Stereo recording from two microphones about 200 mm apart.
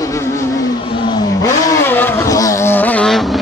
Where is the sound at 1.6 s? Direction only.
15° left (ahead or behind).